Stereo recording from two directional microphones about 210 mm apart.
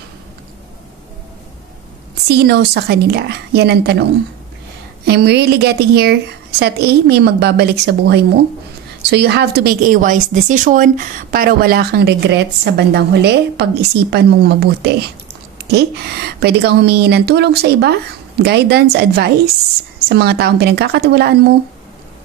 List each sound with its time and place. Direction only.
2.2 s a woman's voice: 50° right (ahead or behind)
5.0 s a woman's voice: 50° right (ahead or behind)